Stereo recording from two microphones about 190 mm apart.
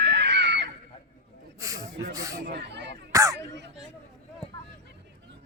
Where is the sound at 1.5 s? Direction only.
15° right (ahead or behind).